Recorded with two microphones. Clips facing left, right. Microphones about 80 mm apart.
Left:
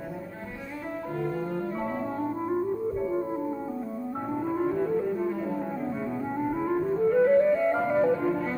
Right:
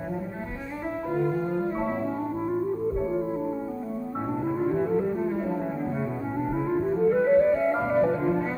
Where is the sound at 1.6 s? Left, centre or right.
Right.